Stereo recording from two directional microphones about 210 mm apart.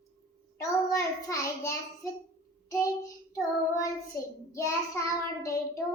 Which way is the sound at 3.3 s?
15° left (ahead or behind).